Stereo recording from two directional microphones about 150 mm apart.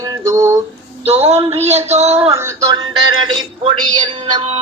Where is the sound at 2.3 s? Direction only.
20° right (ahead or behind).